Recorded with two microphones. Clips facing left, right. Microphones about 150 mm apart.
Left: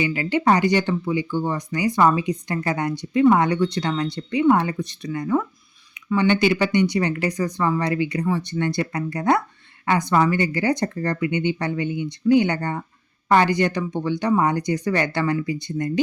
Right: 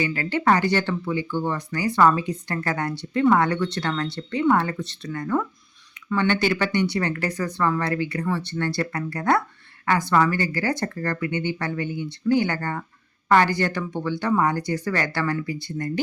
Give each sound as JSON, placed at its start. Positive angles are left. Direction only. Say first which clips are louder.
{"t": 0.0, "sound": "speech", "louder": "left 2 dB", "side_deg": 15}